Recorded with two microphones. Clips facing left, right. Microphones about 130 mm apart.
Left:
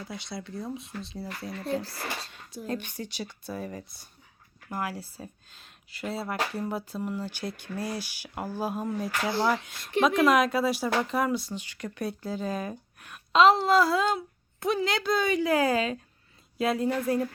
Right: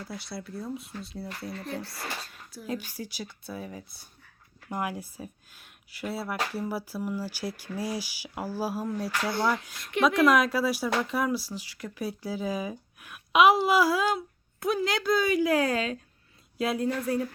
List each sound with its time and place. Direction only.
0.0 s speech: 5° right (ahead or behind)
2.6 s speech: 5° right (ahead or behind)
4.7 s speech: 20° right (ahead or behind); by 9.3 s centre (ahead or behind)
9.3 s speech: 25° left (ahead or behind)
9.6 s speech: centre (ahead or behind)